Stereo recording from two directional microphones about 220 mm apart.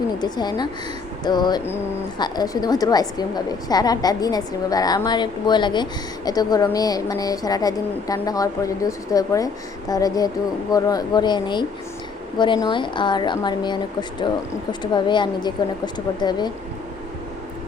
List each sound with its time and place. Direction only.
0.2 s a woman's voice: 20° left (ahead or behind)